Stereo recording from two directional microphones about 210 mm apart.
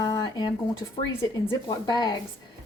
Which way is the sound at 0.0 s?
20° left (ahead or behind).